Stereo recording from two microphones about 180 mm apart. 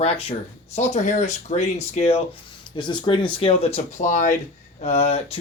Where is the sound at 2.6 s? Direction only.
25° left (ahead or behind).